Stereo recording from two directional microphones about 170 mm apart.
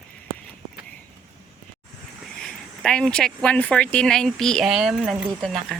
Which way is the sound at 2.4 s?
5° left (ahead or behind).